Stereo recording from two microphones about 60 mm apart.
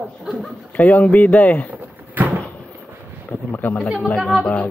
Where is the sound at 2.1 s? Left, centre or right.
Right.